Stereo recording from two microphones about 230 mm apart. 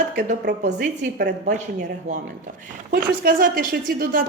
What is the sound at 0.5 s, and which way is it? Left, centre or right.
Speech, right.